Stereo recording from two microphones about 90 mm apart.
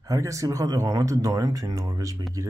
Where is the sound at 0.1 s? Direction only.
35° right (ahead or behind).